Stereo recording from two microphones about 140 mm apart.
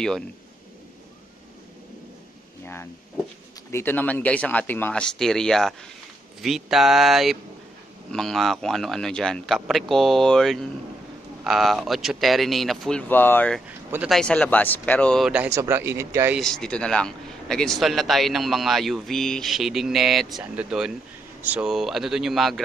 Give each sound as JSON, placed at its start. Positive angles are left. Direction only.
{"t": 2.6, "sound": "a man's voice", "side_deg": 15}
{"t": 13.1, "sound": "speech", "side_deg": 15}
{"t": 14.0, "sound": "speech", "side_deg": 5}
{"t": 15.2, "sound": "speech", "side_deg": -10}
{"t": 15.5, "sound": "speech", "side_deg": -20}
{"t": 16.3, "sound": "a man's voice", "side_deg": 5}